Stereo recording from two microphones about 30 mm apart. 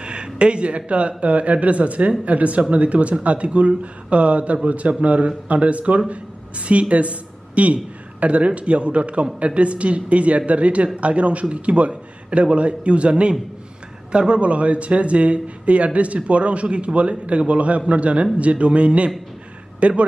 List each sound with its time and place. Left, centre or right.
0.0 s a man's voice: right